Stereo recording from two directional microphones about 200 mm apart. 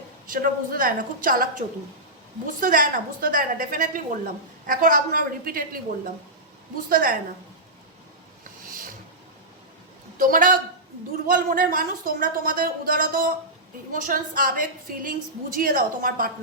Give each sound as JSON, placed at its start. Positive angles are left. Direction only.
{"t": 0.3, "sound": "a woman's voice", "side_deg": -45}
{"t": 6.8, "sound": "a woman's voice", "side_deg": -45}
{"t": 8.6, "sound": "roaring cats", "side_deg": -45}
{"t": 10.2, "sound": "a woman's voice", "side_deg": -45}